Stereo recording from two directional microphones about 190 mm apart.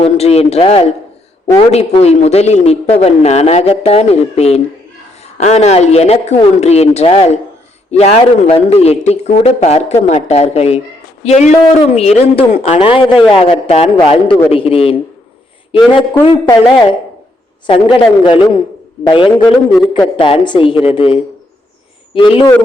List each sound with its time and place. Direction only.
0.0 s a man's voice: 35° left (ahead or behind)
16.2 s a woman's voice: 25° left (ahead or behind)